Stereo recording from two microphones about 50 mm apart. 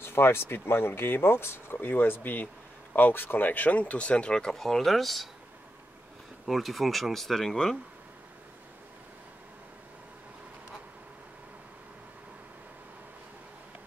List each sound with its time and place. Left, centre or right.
0.0 s speech: left
1.9 s speech: left; by 4.6 s centre
4.6 s speech: centre
6.4 s speech: centre